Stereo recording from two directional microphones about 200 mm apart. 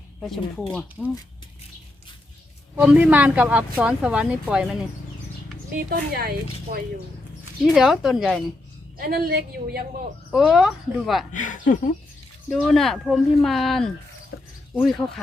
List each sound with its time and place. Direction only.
0.2 s speech: centre (ahead or behind)
2.7 s speech: 5° right (ahead or behind)
5.9 s speech: 50° right (ahead or behind)
7.6 s speech: centre (ahead or behind)
9.0 s speech: 50° right (ahead or behind)
10.3 s speech: centre (ahead or behind)
11.3 s speech: 40° left (ahead or behind)
12.5 s speech: centre (ahead or behind)
14.3 s a sound: 55° left (ahead or behind)
14.8 s speech: 5° left (ahead or behind)